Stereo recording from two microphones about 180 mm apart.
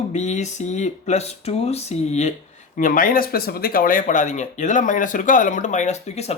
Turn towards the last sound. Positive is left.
turn(degrees=35)  # may be behind; listen again after turning